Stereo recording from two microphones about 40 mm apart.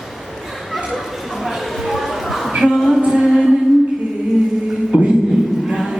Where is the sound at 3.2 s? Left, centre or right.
Centre.